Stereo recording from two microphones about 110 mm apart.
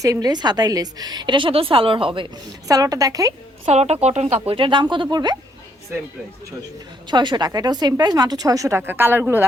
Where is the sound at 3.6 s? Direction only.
80° right.